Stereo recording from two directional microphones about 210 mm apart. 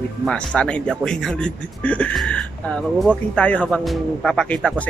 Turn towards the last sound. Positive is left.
turn(degrees=5)  # may be behind; listen again after turning